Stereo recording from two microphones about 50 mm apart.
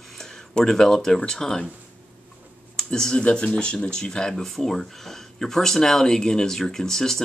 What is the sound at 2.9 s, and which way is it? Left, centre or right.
Speech, centre.